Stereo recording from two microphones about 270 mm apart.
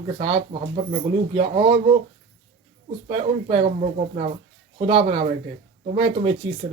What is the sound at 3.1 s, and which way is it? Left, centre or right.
Speech, centre.